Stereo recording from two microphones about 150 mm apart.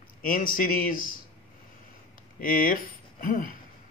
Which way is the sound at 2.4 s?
65° left (ahead or behind).